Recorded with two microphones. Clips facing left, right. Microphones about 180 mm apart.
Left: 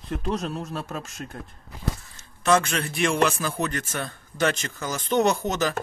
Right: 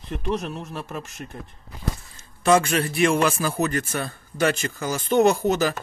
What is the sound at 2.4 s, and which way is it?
A man's voice, 10° right (ahead or behind).